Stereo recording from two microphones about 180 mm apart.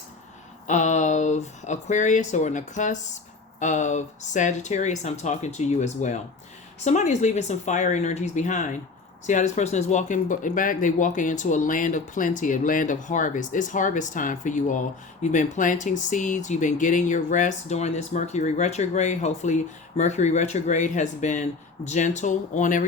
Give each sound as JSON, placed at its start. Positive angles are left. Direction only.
{"t": 0.7, "sound": "speech", "side_deg": 40}